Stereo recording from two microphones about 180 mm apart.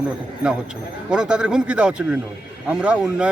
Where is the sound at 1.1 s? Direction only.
5° right (ahead or behind).